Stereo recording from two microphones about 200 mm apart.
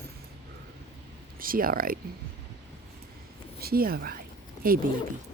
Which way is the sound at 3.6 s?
50° right (ahead or behind).